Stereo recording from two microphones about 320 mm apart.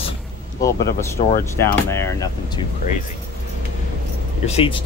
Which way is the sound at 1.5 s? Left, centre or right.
Centre.